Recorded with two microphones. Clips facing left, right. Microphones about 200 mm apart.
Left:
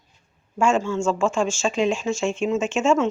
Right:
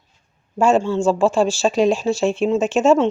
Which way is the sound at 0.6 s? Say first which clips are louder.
Right 4 dB; 35° right (ahead or behind).